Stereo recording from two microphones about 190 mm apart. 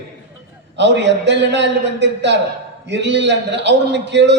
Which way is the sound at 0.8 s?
65° right (ahead or behind).